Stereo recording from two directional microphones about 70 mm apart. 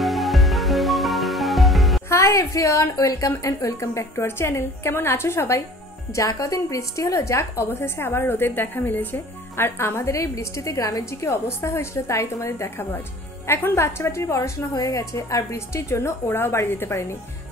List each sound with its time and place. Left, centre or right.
0.0 s music: centre
2.0 s a woman's voice: left
6.1 s a woman's voice: left
14.7 s a woman's voice: left